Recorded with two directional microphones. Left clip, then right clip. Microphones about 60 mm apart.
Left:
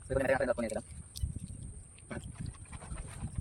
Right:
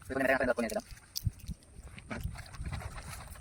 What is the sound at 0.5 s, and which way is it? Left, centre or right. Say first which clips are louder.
Speech: right 2 dB; centre.